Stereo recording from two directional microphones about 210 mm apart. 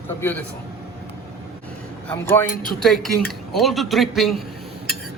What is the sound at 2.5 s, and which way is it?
Speech, 40° left (ahead or behind).